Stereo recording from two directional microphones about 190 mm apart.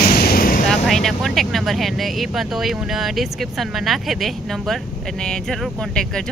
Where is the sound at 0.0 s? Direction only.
55° left (ahead or behind).